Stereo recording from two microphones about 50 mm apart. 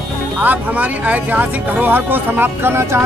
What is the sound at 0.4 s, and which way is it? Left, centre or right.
Speech, right.